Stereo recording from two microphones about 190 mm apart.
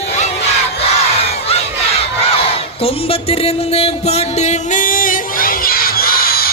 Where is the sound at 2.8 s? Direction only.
30° left (ahead or behind); by 6.5 s 50° left (ahead or behind).